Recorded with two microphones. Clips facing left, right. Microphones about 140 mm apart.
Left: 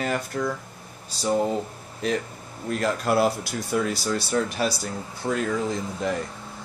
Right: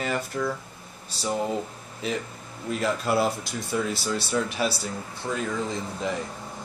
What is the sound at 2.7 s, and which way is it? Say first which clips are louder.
Speech: left 2 dB; centre (ahead or behind).